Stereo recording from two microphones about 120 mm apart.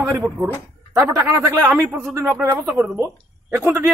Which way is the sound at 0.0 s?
20° right (ahead or behind).